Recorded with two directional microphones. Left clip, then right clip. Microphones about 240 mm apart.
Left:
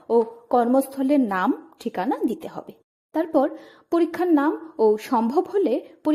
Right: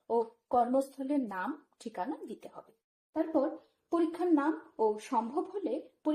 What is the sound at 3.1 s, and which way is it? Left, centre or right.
A woman's voice, left.